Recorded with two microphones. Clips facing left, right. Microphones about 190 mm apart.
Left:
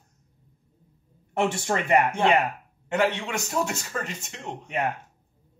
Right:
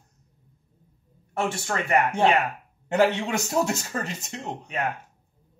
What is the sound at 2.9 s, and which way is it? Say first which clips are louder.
Speech: right 3 dB; 35° right (ahead or behind).